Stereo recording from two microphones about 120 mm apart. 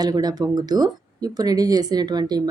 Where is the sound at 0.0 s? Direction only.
35° right (ahead or behind).